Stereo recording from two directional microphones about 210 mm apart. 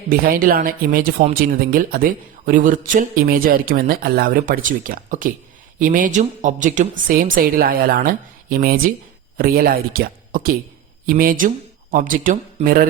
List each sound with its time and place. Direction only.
0.1 s speech: 40° right (ahead or behind)